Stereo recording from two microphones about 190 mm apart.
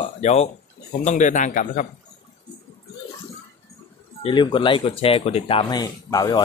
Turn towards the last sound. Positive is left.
turn(degrees=20)  # may be behind; listen again after turning